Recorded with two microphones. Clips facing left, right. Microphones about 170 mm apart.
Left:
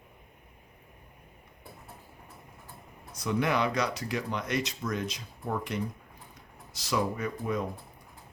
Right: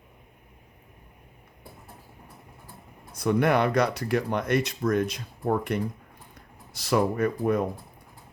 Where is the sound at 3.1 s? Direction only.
55° right (ahead or behind).